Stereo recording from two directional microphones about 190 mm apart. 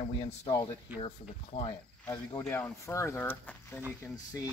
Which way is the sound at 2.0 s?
10° left (ahead or behind).